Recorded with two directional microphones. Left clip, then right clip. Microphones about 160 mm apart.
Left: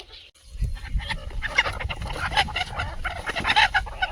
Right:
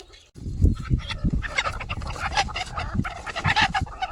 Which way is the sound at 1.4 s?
40° left (ahead or behind).